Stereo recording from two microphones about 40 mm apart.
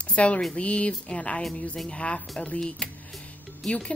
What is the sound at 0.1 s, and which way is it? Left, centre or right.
Speech, left.